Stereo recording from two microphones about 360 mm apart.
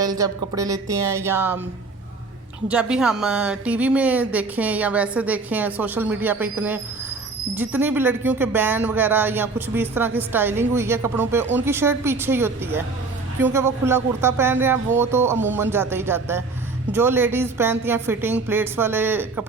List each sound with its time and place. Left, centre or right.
0.0 s speech: centre
2.6 s a woman's voice: centre